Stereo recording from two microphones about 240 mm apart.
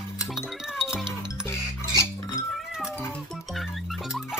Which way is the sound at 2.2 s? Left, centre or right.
Centre.